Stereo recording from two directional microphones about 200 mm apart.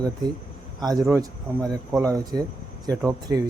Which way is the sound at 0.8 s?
20° right (ahead or behind).